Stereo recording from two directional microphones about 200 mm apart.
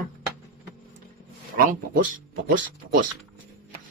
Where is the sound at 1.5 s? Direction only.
45° right (ahead or behind).